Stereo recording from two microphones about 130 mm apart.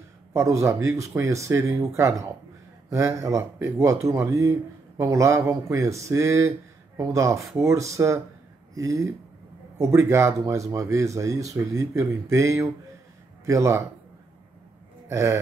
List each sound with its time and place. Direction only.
0.3 s speech: 20° right (ahead or behind)
15.0 s speech: 20° right (ahead or behind)